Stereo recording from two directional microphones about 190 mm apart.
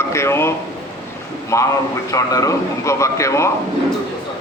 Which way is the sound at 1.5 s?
15° left (ahead or behind).